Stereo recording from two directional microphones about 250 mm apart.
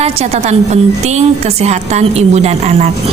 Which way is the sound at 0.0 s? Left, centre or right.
Right.